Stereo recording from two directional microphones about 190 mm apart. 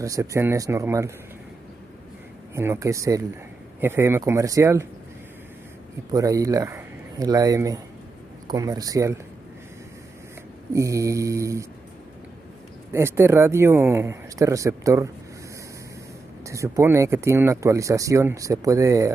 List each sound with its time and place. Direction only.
0.0 s speech: 15° right (ahead or behind)
2.5 s speech: 15° right (ahead or behind)
6.1 s speech: 15° right (ahead or behind)
10.7 s speech: 15° right (ahead or behind)
12.9 s speech: 15° right (ahead or behind)
16.4 s speech: 15° right (ahead or behind)